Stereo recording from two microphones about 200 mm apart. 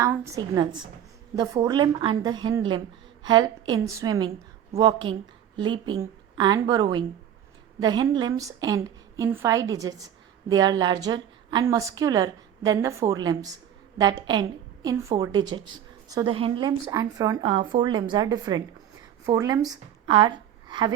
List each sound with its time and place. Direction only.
0.0 s a woman's voice: 15° right (ahead or behind)